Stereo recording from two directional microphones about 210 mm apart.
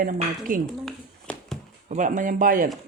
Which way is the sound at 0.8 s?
Centre (ahead or behind).